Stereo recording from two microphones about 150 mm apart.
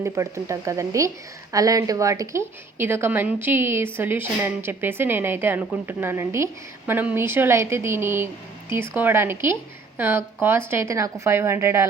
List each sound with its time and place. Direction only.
0.0 s a woman's voice: 20° right (ahead or behind)